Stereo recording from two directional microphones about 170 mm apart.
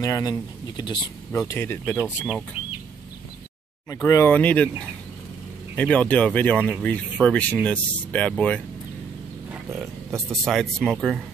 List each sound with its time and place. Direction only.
0.0 s speech: 20° left (ahead or behind)
1.5 s speech: 10° left (ahead or behind)
2.0 s speech: 5° right (ahead or behind)
3.9 s speech: 20° left (ahead or behind)
9.5 s speech: 10° right (ahead or behind)